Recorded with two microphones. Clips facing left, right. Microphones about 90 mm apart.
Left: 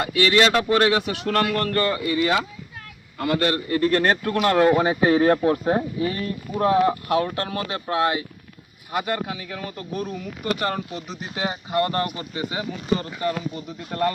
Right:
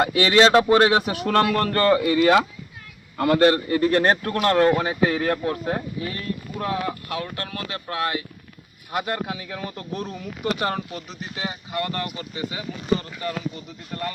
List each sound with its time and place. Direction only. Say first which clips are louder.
0.0 s a man's voice: right 2 dB; 35° right (ahead or behind)
1.8 s speech: right 5 dB; 50° right (ahead or behind)
3.2 s a man's voice: right 5 dB; 35° right (ahead or behind)
3.7 s speech: right 1 dB; 5° right (ahead or behind)
4.8 s speech: left 4 dB; 20° left (ahead or behind)
8.9 s speech: left 1 dB; centre (ahead or behind)
11.3 s speech: left 5 dB; 30° left (ahead or behind)
13.9 s speech: left 7 dB; 45° left (ahead or behind)